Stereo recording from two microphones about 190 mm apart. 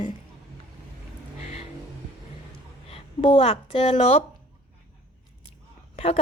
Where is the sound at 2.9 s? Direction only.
30° left (ahead or behind).